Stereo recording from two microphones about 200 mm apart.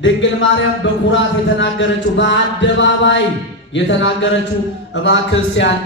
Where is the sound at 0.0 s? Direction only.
65° left (ahead or behind).